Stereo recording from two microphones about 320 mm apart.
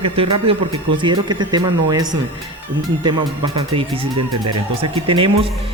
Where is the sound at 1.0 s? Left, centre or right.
Centre.